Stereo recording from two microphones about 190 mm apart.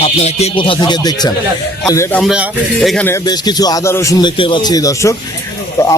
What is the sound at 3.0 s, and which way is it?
A man's voice, 15° left (ahead or behind).